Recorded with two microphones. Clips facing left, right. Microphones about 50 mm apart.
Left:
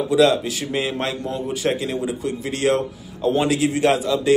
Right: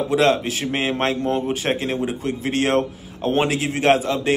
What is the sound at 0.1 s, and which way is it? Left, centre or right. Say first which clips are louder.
A man's voice: left 2 dB; right.